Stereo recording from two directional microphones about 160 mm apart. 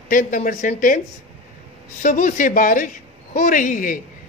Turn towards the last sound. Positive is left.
turn(degrees=55)  # may be behind; listen again after turning